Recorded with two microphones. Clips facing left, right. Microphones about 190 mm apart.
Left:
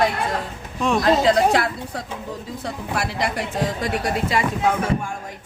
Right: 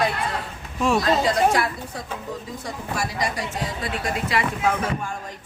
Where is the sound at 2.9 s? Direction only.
65° left (ahead or behind).